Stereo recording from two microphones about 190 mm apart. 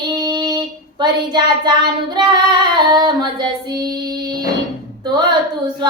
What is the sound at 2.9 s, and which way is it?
Female singing, 25° right (ahead or behind).